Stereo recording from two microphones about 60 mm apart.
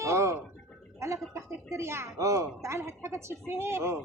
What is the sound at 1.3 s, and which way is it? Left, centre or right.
Speech, right.